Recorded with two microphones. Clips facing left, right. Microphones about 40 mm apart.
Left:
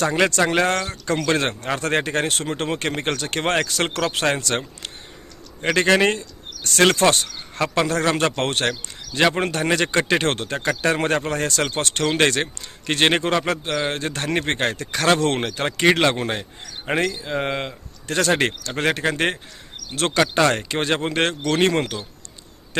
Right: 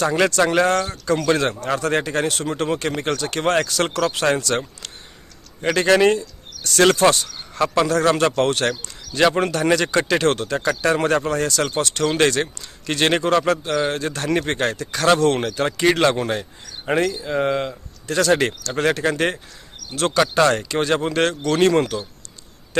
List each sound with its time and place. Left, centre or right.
0.5 s speech: left
9.1 s a man's voice: centre
9.4 s a man's voice: left
17.0 s speech: left
17.2 s a man's voice: left
18.1 s a man's voice: left